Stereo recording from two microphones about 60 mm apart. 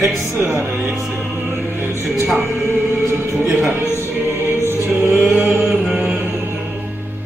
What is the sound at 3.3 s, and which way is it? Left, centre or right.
Speech, right.